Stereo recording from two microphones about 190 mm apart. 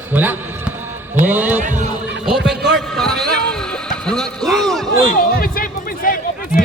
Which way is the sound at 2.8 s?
Centre (ahead or behind).